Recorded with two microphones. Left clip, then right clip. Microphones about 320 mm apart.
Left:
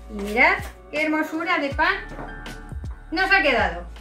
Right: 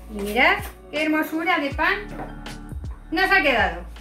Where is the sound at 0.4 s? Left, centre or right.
Centre.